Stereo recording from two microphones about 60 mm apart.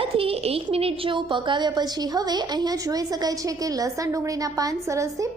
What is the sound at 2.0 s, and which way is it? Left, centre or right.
A woman's voice, right.